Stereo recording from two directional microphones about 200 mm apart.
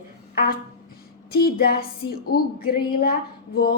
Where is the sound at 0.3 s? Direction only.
45° left (ahead or behind).